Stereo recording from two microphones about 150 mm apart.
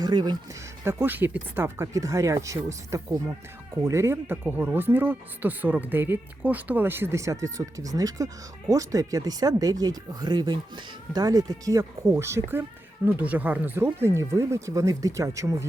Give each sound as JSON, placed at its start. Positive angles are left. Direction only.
{"t": 0.0, "sound": "speech", "side_deg": -30}
{"t": 0.9, "sound": "speech", "side_deg": -15}